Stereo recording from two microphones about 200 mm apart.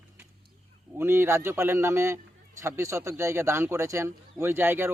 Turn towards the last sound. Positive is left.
turn(degrees=-10)  # may be behind; listen again after turning